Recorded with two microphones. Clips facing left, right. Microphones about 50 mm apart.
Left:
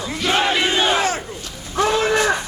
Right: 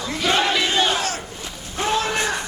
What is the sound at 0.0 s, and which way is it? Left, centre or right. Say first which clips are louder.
Battle cry: left 1 dB; centre.